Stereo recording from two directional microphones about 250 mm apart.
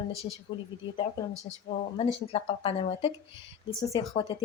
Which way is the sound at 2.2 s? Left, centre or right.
Left.